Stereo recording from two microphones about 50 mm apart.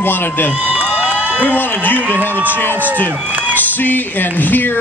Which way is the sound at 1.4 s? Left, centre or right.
Left.